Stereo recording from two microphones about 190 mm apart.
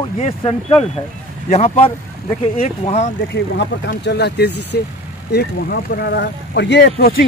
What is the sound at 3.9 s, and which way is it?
Speech, 60° left (ahead or behind).